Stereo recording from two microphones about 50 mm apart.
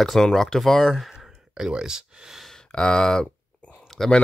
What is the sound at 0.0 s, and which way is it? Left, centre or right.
Speech, centre.